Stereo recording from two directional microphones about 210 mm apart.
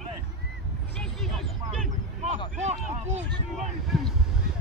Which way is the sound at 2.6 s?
35° right (ahead or behind).